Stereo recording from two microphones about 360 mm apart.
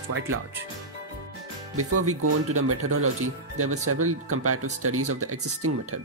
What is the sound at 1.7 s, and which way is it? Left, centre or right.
Speech, right.